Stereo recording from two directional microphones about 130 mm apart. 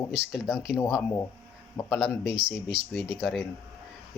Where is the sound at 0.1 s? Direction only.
5° right (ahead or behind).